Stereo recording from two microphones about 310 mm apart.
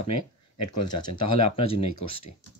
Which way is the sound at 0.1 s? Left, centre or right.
Left.